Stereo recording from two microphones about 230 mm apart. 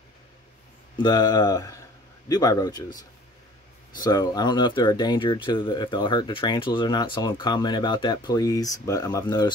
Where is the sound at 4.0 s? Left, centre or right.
Centre.